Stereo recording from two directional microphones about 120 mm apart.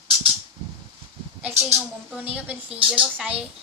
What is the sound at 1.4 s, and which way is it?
A woman's voice, 15° right (ahead or behind).